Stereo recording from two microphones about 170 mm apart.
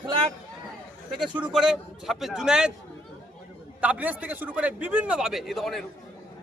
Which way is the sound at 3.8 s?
10° right (ahead or behind).